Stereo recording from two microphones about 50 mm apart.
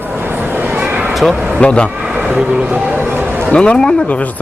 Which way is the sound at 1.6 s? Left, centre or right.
Left.